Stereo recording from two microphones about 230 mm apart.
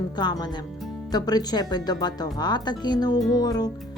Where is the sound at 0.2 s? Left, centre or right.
Centre.